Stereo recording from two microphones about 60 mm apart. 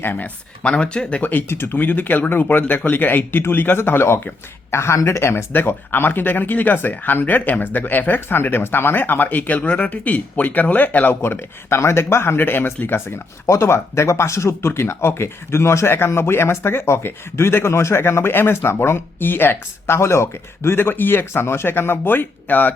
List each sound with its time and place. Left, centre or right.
0.0 s speech: left
0.6 s speech: centre
1.2 s speech: left
1.5 s speech: left
1.8 s speech: left
11.1 s speech: left